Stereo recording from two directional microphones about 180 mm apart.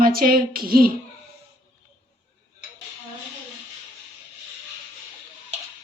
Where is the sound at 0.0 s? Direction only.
55° right (ahead or behind).